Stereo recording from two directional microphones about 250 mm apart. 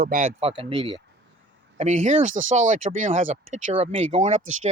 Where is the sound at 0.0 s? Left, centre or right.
Right.